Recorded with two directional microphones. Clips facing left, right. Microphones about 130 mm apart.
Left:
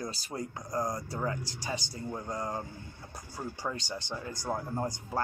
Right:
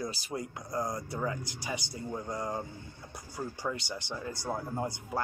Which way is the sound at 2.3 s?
20° left (ahead or behind).